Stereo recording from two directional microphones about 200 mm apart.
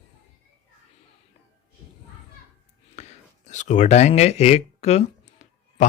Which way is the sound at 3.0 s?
35° left (ahead or behind).